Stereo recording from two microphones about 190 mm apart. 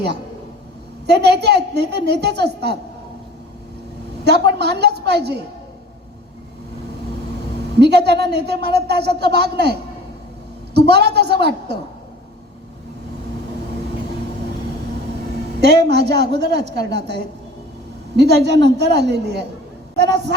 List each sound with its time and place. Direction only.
1.0 s a woman's voice: 60° right (ahead or behind)
4.2 s a woman's voice: 60° right (ahead or behind)
7.8 s a woman's voice: 60° right (ahead or behind)
10.8 s a woman's voice: 60° right (ahead or behind)
15.6 s a woman's voice: 60° right (ahead or behind)